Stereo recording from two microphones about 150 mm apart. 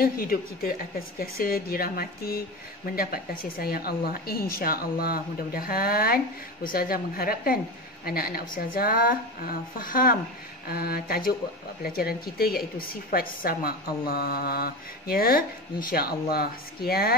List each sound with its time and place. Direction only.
0.0 s a woman's voice: 75° left (ahead or behind)
10.7 s a woman's voice: 90° left